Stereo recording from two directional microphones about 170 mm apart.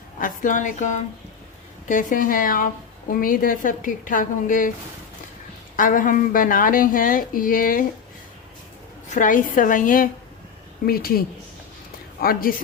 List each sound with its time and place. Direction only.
0.2 s a woman's voice: 50° left (ahead or behind)
5.7 s a woman's voice: 50° left (ahead or behind)
9.0 s a woman's voice: 50° left (ahead or behind)
12.2 s speech: 60° left (ahead or behind)